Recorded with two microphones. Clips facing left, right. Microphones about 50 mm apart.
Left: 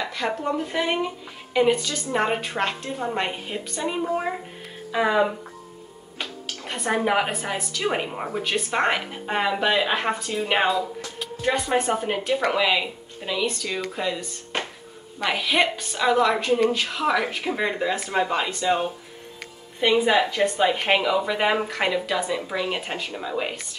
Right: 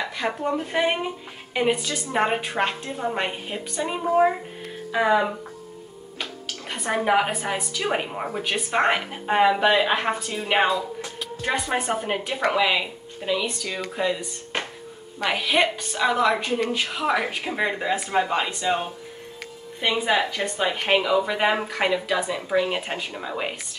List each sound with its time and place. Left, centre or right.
0.1 s speech: centre
0.7 s a woman's voice: centre
6.7 s a woman's voice: centre
19.8 s a woman's voice: centre